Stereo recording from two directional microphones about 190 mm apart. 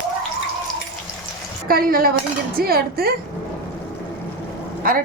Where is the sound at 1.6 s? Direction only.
50° right (ahead or behind).